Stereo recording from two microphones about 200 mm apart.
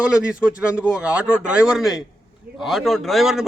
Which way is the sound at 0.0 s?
5° right (ahead or behind).